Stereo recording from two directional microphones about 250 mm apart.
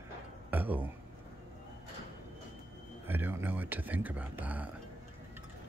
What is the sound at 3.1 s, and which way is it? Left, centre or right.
Speech, centre.